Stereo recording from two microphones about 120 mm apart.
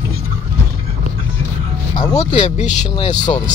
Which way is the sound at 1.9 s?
35° left (ahead or behind).